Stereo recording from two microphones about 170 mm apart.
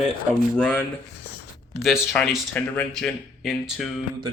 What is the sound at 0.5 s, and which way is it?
Speech, 10° left (ahead or behind).